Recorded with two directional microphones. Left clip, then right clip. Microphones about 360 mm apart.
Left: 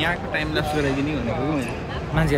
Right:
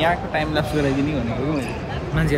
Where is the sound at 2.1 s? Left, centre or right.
Centre.